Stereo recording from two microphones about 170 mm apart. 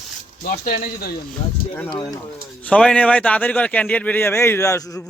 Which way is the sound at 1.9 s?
25° left (ahead or behind).